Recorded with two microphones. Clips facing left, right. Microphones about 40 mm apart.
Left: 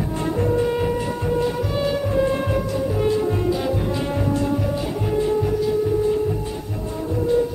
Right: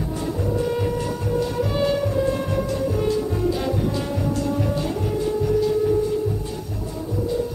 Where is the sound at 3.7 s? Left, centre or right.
Left.